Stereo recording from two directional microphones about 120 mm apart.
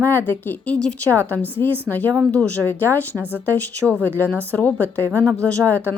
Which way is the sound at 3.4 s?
15° left (ahead or behind).